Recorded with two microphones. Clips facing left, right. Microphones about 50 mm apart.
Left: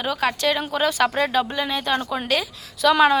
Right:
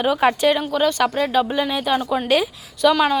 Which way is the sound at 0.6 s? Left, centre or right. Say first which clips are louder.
Right 2 dB; centre.